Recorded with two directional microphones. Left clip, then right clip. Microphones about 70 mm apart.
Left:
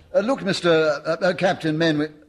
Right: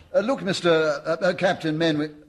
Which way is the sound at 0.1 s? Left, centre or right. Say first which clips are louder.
Left 2 dB; right.